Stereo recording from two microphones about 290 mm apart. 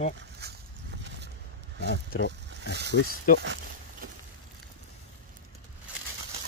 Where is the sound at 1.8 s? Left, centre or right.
Left.